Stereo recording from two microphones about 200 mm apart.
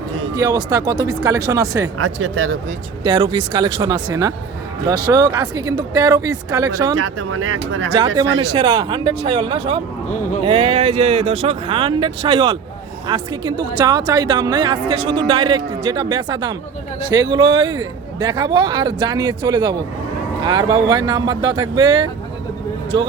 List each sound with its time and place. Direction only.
0.3 s speech: 20° right (ahead or behind)
2.3 s speech: 90° right
3.0 s a woman's voice: 25° right (ahead or behind)
6.9 s speech: 80° right
7.9 s a woman's voice: 25° right (ahead or behind)